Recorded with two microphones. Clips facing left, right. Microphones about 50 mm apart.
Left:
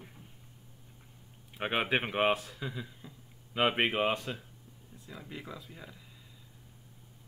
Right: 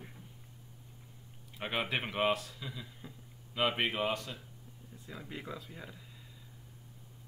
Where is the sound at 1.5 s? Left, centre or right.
Left.